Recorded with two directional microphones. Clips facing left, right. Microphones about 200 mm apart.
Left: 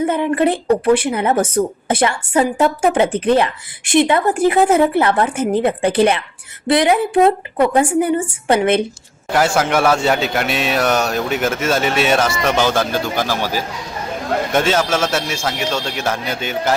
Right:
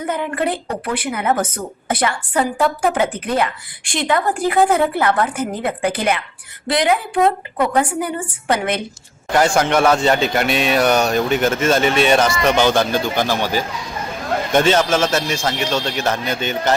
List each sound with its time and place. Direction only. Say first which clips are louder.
0.0 s speech: left 5 dB; 25° left (ahead or behind)
9.3 s a man's voice: even; 5° left (ahead or behind)